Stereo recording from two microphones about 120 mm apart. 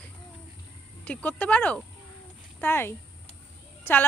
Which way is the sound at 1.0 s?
15° left (ahead or behind).